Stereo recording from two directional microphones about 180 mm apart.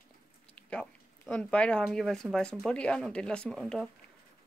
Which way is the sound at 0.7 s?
5° left (ahead or behind).